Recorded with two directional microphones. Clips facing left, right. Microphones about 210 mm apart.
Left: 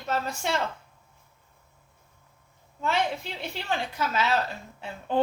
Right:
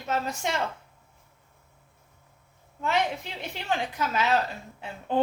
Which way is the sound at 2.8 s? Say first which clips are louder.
Even; 15° right (ahead or behind).